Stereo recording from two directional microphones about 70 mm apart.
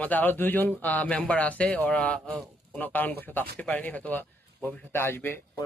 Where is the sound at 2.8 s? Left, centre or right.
Left.